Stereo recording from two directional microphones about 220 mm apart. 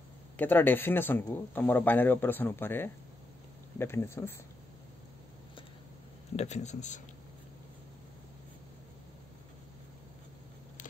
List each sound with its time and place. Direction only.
0.4 s a man's voice: 10° left (ahead or behind)
6.3 s speech: 30° left (ahead or behind)